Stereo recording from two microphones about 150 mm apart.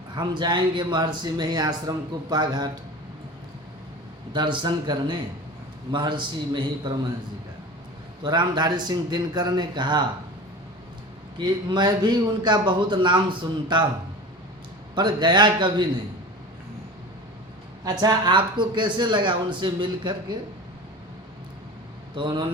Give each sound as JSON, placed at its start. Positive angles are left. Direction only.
{"t": 0.2, "sound": "a man's voice", "side_deg": -30}
{"t": 4.3, "sound": "speech", "side_deg": -30}
{"t": 8.2, "sound": "a man's voice", "side_deg": -30}
{"t": 11.3, "sound": "a man's voice", "side_deg": -30}
{"t": 14.9, "sound": "speech", "side_deg": -30}
{"t": 18.0, "sound": "speech", "side_deg": -30}
{"t": 22.1, "sound": "speech", "side_deg": -30}